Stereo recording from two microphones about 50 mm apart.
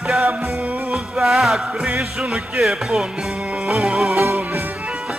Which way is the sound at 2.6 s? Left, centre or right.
Centre.